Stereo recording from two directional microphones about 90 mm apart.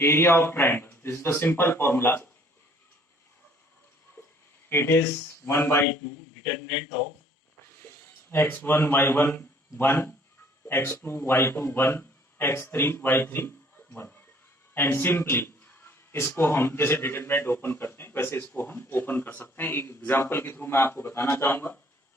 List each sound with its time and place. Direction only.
0.0 s speech: 25° left (ahead or behind)
4.7 s speech: 25° left (ahead or behind)
7.6 s speech: 25° left (ahead or behind)